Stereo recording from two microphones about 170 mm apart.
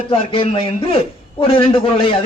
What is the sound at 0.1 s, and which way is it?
A man's voice, 30° left (ahead or behind).